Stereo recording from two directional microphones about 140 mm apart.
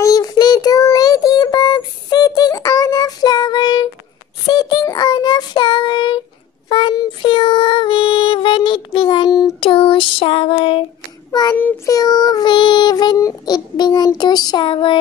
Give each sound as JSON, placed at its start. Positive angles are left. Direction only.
{"t": 0.0, "sound": "child singing", "side_deg": 25}
{"t": 11.5, "sound": "child singing", "side_deg": 10}
{"t": 11.9, "sound": "child singing", "side_deg": 30}